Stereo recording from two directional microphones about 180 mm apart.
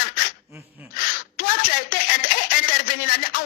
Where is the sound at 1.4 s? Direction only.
50° left (ahead or behind).